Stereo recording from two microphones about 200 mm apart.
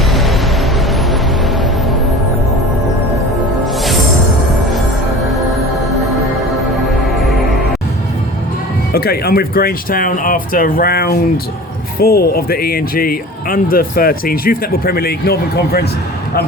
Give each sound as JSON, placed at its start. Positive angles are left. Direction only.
{"t": 0.1, "sound": "music", "side_deg": 0}
{"t": 8.9, "sound": "speech", "side_deg": 50}